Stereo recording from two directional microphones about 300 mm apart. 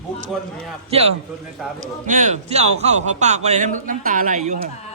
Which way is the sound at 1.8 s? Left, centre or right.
Right.